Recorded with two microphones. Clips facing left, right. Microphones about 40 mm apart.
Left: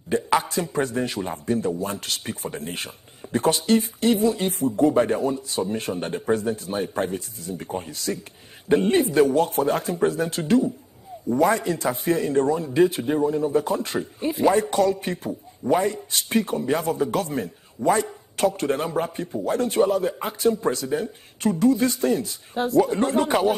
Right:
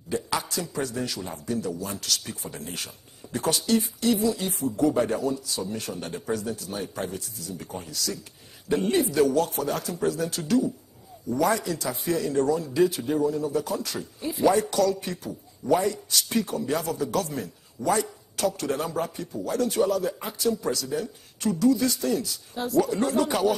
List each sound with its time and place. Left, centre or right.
0.1 s a man's voice: left